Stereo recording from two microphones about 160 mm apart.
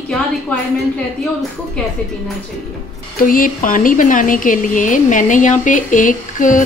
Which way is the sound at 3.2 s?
60° left (ahead or behind).